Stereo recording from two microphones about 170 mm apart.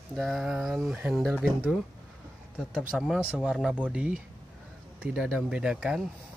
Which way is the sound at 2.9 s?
5° right (ahead or behind).